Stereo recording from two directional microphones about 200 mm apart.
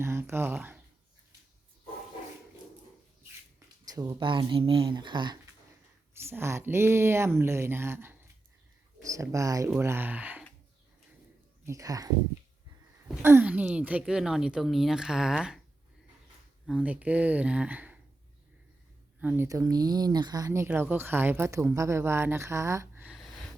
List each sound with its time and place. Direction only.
0.0 s speech: 10° right (ahead or behind)
3.8 s speech: 15° right (ahead or behind)
6.1 s speech: 10° right (ahead or behind)
11.6 s speech: 15° right (ahead or behind)
16.6 s speech: 5° right (ahead or behind)
19.2 s speech: 10° right (ahead or behind)